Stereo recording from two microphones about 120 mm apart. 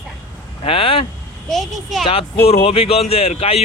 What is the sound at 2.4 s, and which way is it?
Speech, 55° left (ahead or behind).